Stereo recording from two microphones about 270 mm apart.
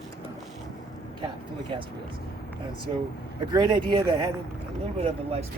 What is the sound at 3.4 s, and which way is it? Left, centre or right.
Speech, centre.